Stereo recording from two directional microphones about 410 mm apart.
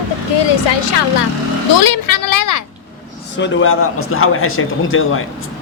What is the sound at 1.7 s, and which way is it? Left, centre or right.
Speech, left.